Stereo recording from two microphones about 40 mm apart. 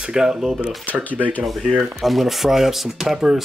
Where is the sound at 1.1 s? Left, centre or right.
Left.